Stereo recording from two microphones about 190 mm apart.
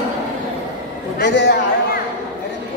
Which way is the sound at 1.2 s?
65° left (ahead or behind).